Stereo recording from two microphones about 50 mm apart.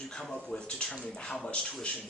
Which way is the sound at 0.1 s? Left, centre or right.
Centre.